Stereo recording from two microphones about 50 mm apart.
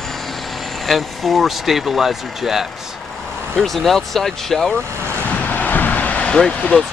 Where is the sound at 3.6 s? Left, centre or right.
Centre.